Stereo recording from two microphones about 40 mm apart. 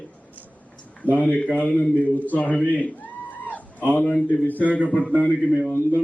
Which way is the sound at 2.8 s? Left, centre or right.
Left.